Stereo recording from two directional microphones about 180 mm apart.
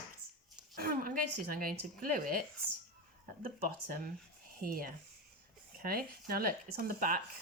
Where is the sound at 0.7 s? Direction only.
50° right (ahead or behind).